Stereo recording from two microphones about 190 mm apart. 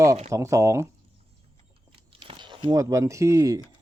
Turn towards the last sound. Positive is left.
turn(degrees=-15)  # may be behind; listen again after turning